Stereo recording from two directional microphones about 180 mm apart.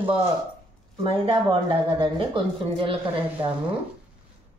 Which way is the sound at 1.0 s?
30° right (ahead or behind).